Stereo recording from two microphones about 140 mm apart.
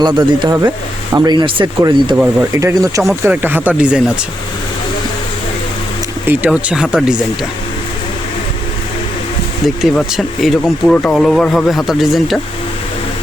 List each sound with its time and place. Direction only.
0.0 s speech: 30° right (ahead or behind)
2.6 s speech: 25° right (ahead or behind); by 4.0 s 10° right (ahead or behind)
6.2 s speech: 10° right (ahead or behind)
9.6 s speech: centre (ahead or behind)